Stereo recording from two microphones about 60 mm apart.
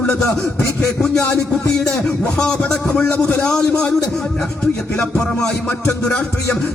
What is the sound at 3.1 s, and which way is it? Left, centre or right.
Speech, left.